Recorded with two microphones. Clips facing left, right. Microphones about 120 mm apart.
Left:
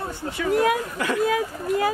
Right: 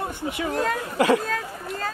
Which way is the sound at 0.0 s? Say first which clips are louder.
Right 1 dB; 15° right (ahead or behind).